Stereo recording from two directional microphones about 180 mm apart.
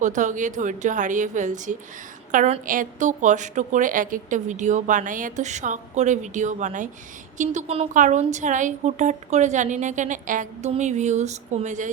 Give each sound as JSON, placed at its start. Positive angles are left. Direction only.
{"t": 0.0, "sound": "a woman's voice", "side_deg": -45}